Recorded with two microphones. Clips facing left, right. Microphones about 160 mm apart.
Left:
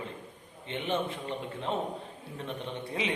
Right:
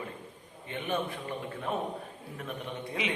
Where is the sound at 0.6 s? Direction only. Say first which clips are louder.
Left 1 dB; 25° left (ahead or behind).